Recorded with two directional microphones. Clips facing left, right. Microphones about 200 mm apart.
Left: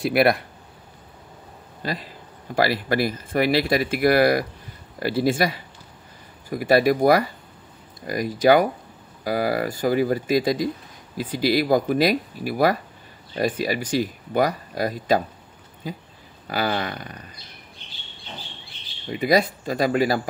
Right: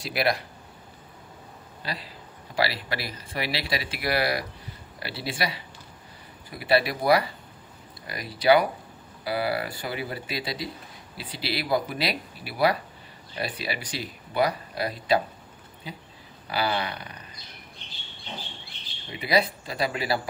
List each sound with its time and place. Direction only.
0.0 s speech: 55° left (ahead or behind)
1.8 s speech: 45° left (ahead or behind)
19.1 s speech: 45° left (ahead or behind)